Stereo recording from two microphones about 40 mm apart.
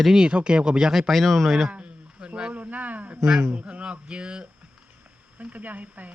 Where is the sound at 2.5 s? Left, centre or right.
Right.